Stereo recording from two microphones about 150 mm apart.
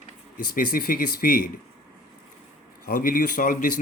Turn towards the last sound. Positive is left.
turn(degrees=65)  # may be behind; listen again after turning